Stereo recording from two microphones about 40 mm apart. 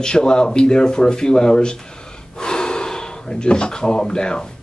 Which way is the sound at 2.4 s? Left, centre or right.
Centre.